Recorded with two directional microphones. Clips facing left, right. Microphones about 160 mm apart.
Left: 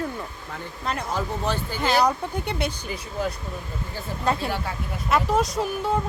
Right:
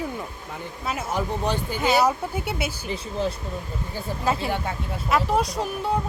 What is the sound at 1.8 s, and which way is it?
Speech, 5° right (ahead or behind).